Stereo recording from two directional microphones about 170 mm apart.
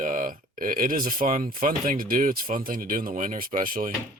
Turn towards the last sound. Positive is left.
turn(degrees=-55)  # may be behind; listen again after turning